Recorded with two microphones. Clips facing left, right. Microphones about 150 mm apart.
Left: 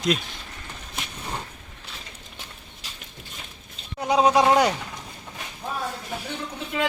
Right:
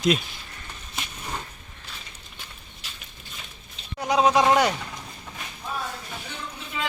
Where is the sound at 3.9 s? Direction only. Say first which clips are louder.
Left 1 dB; 30° left (ahead or behind).